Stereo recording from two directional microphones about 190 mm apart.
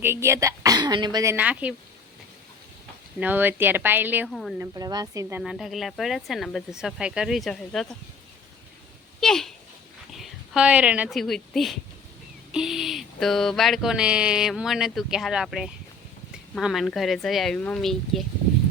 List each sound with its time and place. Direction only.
0.0 s a woman's voice: 15° right (ahead or behind)
3.2 s a woman's voice: 10° right (ahead or behind)
4.3 s speech: centre (ahead or behind)
4.5 s speech: 15° right (ahead or behind)
5.4 s speech: centre (ahead or behind)
9.2 s speech: centre (ahead or behind)